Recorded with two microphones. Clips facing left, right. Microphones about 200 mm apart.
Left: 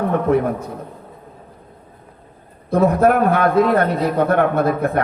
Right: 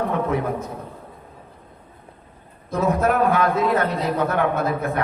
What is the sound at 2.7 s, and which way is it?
A man's voice, 55° left (ahead or behind).